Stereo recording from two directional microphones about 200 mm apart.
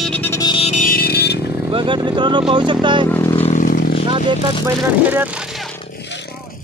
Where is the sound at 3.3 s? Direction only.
35° left (ahead or behind).